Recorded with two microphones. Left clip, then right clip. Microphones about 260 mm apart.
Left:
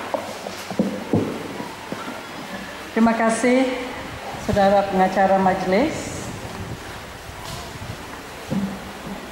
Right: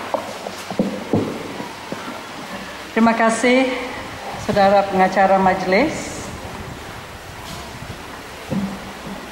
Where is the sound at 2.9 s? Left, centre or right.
Centre.